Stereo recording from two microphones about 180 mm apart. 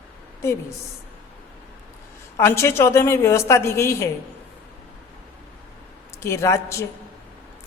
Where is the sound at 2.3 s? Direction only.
15° left (ahead or behind).